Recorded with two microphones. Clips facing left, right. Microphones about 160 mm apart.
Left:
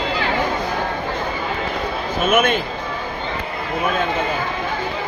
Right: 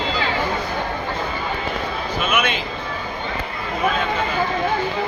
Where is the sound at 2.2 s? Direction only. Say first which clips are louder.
Left 6 dB; 50° left (ahead or behind).